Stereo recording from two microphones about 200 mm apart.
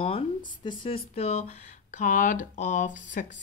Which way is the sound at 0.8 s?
30° left (ahead or behind).